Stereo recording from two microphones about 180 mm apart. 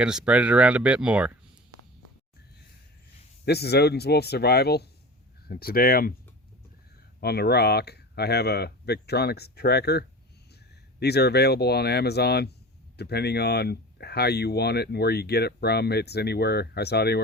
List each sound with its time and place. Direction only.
0.0 s speech: 5° right (ahead or behind)
3.4 s speech: 65° left (ahead or behind)
7.2 s speech: 65° left (ahead or behind)
11.0 s speech: 65° left (ahead or behind)